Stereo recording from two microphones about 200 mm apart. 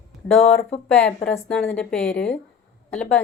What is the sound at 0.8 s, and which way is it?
A woman's voice, 5° left (ahead or behind).